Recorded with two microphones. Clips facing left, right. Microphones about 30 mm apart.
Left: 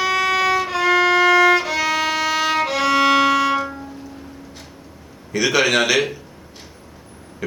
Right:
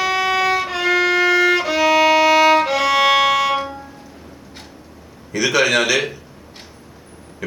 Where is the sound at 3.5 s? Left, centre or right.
Centre.